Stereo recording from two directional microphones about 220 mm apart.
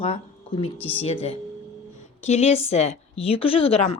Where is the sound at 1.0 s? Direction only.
30° left (ahead or behind).